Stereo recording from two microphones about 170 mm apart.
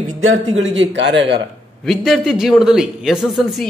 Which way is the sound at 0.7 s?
90° right.